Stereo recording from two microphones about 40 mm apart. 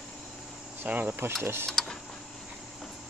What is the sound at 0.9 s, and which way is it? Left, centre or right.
Speech, right.